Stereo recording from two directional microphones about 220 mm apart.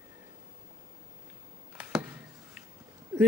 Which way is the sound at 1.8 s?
5° right (ahead or behind).